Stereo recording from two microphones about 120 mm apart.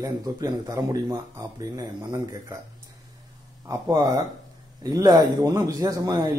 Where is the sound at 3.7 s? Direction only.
35° right (ahead or behind).